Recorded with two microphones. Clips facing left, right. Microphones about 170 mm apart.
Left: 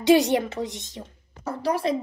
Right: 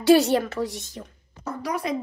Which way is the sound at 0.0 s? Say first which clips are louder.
Right 1 dB; 20° left (ahead or behind).